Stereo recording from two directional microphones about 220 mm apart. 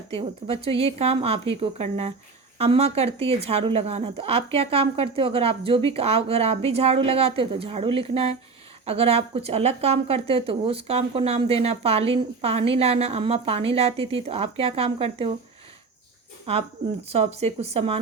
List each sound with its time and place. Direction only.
0.2 s speech: 25° right (ahead or behind)
17.1 s speech: 30° right (ahead or behind)